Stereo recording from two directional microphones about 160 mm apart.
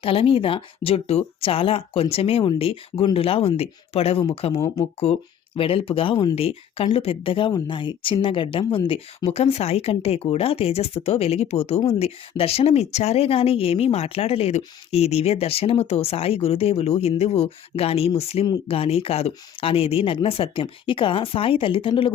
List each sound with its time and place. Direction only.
0.0 s speech: 35° left (ahead or behind)